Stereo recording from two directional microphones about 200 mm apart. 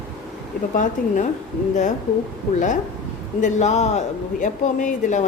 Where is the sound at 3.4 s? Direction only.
35° left (ahead or behind).